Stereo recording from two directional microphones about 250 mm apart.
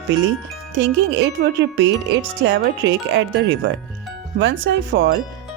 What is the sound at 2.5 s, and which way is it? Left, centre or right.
Speech, right.